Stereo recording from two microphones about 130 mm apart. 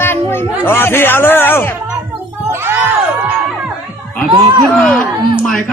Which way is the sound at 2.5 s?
15° right (ahead or behind).